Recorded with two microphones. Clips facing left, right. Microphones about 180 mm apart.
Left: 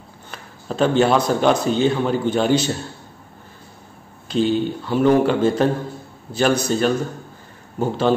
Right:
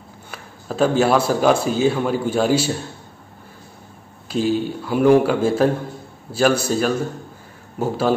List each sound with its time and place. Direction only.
0.3 s a man's voice: 5° right (ahead or behind)
4.3 s a man's voice: 5° right (ahead or behind)